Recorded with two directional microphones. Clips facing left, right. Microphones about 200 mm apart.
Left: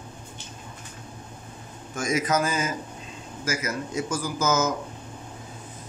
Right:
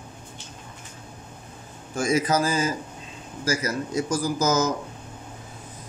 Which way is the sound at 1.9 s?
30° right (ahead or behind).